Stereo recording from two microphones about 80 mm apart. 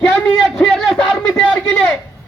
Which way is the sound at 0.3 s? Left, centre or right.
Centre.